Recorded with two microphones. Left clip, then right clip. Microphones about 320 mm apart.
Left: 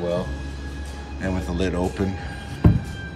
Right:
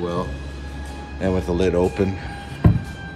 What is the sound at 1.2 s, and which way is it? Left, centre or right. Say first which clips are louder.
Speech: right 6 dB; centre.